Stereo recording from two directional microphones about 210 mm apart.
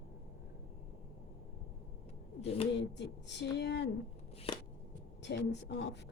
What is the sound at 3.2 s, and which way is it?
Speech, 55° left (ahead or behind).